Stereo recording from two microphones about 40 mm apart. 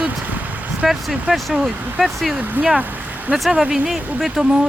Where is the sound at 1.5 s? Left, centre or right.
Right.